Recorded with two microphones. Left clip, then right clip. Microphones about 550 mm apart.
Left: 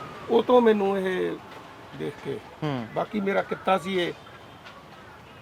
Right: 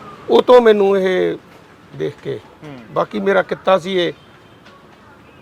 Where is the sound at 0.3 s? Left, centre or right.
Right.